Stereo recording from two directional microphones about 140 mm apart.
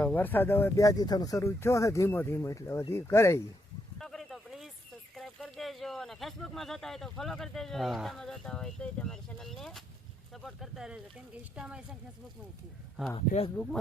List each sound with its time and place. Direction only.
0.0 s speech: 15° left (ahead or behind)
3.9 s a sound: centre (ahead or behind)
5.1 s a woman's voice: centre (ahead or behind)
13.1 s speech: 40° left (ahead or behind)